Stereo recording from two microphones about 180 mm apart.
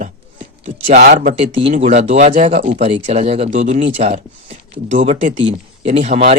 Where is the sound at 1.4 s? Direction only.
35° right (ahead or behind).